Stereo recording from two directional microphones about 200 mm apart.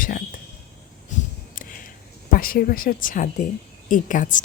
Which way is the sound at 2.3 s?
45° left (ahead or behind).